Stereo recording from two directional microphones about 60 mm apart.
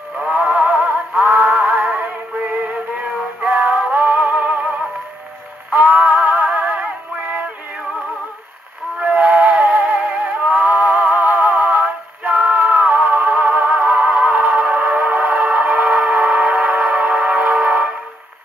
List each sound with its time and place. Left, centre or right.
0.2 s music: centre
6.5 s synthetic singing: right
9.0 s music: right